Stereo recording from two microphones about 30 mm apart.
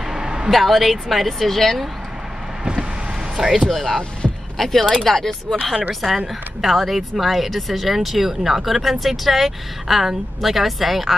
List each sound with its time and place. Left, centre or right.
0.1 s a sound: right
0.5 s speech: centre
1.6 s speech: centre
3.3 s speech: centre
3.6 s speech: centre
5.9 s speech: centre